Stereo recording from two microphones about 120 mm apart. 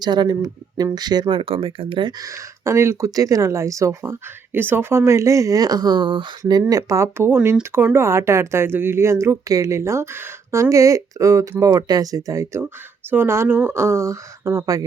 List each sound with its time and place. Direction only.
0.0 s speech: 35° right (ahead or behind)
1.4 s speech: 50° right (ahead or behind)
2.2 s speech: 25° right (ahead or behind); by 6.2 s 40° right (ahead or behind)
6.4 s speech: 30° right (ahead or behind)